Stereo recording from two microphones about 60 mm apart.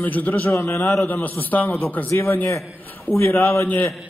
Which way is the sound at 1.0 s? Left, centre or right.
Left.